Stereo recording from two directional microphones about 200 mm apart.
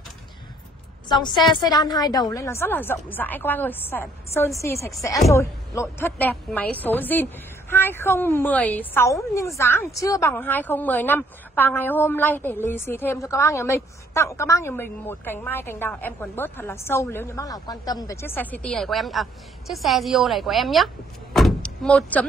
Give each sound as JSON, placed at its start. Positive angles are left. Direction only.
{"t": 1.0, "sound": "a woman's voice", "side_deg": 20}